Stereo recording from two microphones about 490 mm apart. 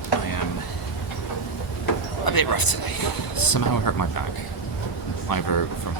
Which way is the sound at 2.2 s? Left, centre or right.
Left.